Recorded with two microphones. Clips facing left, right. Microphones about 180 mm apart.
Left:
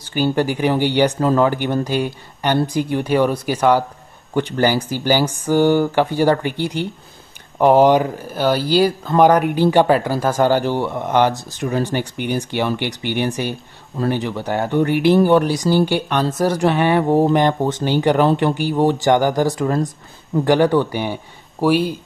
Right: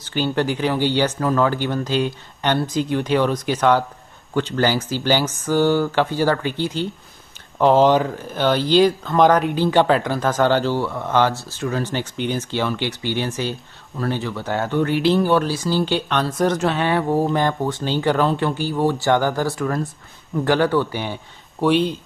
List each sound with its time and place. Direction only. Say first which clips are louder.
0.0 s speech: left 3 dB; 10° left (ahead or behind)